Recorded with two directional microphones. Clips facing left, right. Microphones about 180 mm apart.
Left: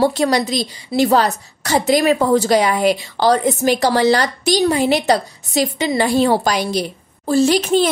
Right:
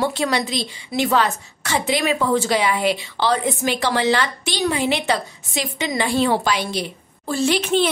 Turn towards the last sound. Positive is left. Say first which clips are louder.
# left 5 dB
turn(degrees=40)  # may be behind; listen again after turning